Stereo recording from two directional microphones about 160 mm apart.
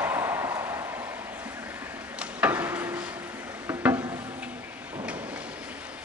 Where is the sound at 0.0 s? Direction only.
15° right (ahead or behind).